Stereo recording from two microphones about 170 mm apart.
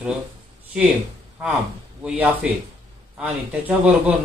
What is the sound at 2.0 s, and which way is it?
A man's voice, 5° right (ahead or behind).